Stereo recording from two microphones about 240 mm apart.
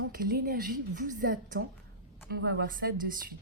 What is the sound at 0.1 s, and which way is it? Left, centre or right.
A woman's voice, right.